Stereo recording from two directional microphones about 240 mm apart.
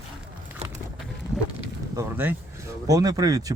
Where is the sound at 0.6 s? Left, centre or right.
Right.